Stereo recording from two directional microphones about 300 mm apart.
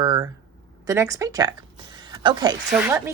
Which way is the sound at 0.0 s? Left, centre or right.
Centre.